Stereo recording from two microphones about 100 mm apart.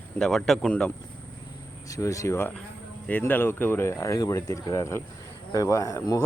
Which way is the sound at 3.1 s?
15° left (ahead or behind).